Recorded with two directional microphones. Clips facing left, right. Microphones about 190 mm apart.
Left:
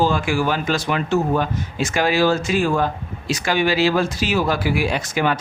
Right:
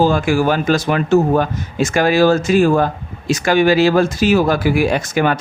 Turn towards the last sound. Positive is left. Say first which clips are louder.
# right 5 dB
turn(degrees=-50)  # may be behind; listen again after turning